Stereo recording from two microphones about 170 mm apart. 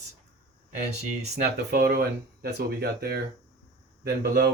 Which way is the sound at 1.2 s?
55° right (ahead or behind).